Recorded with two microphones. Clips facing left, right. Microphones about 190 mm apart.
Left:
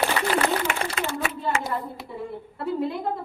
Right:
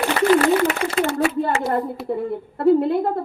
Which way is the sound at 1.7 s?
55° right (ahead or behind).